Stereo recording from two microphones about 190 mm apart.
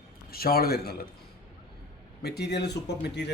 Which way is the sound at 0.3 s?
55° left (ahead or behind).